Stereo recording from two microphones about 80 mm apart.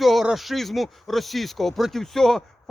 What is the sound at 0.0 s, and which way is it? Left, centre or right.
A man's voice, centre.